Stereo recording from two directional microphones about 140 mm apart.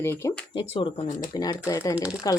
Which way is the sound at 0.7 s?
40° left (ahead or behind).